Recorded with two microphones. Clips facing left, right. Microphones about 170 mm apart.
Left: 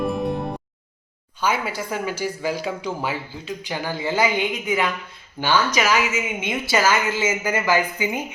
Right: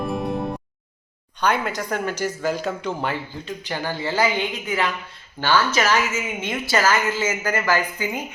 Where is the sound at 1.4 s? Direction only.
5° left (ahead or behind).